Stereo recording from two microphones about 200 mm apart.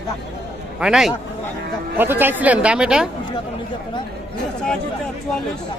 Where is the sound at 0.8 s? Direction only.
5° right (ahead or behind).